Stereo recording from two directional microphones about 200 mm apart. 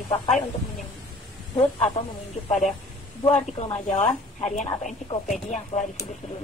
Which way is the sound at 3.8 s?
35° left (ahead or behind).